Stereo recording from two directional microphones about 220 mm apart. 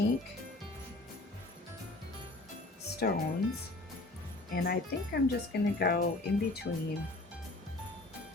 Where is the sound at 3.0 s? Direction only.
45° left (ahead or behind).